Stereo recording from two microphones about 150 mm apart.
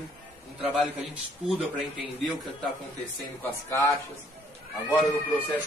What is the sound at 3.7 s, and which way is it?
Speech, 20° left (ahead or behind).